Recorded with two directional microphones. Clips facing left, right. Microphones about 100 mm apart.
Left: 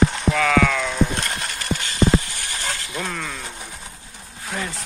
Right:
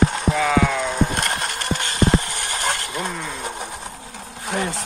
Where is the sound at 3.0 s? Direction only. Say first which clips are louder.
Right 1 dB; 20° right (ahead or behind).